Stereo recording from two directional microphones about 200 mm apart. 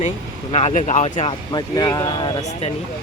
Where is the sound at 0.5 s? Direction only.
35° left (ahead or behind).